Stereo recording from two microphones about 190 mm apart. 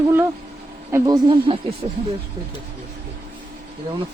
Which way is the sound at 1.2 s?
30° right (ahead or behind).